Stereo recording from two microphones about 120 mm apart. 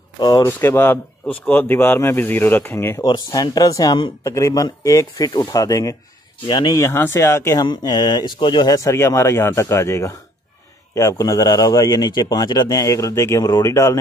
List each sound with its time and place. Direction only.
0.4 s speech: 20° left (ahead or behind)
3.0 s a man's voice: 35° left (ahead or behind)
6.4 s speech: 45° left (ahead or behind)
6.7 s a man's voice: 20° left (ahead or behind)
7.6 s a man's voice: 35° left (ahead or behind)